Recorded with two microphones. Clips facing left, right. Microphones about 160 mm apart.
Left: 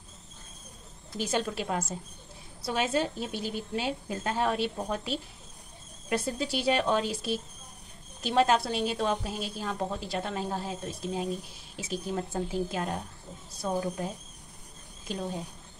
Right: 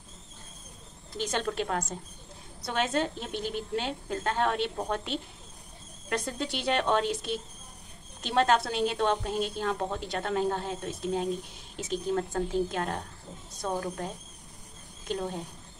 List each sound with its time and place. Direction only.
1.1 s a woman's voice: 5° left (ahead or behind)